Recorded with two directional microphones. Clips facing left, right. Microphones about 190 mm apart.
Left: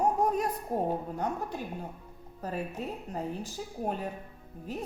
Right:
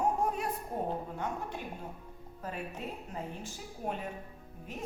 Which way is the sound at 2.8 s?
40° left (ahead or behind).